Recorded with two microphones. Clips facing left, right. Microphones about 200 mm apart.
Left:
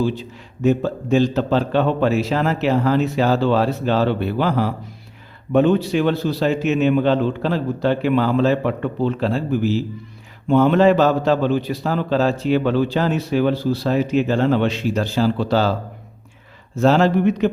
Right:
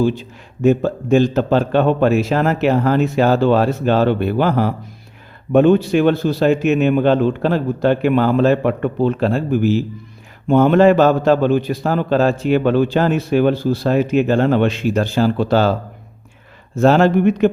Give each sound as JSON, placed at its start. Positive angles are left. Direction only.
{"t": 0.0, "sound": "a man's voice", "side_deg": -50}
{"t": 16.7, "sound": "a man's voice", "side_deg": -55}